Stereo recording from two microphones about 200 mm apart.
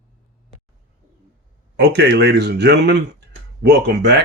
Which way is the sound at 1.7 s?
55° right (ahead or behind).